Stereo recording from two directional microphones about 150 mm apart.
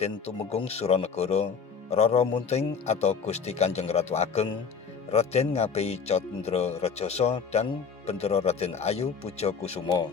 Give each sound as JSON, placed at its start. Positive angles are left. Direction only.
{"t": 0.5, "sound": "speech", "side_deg": 45}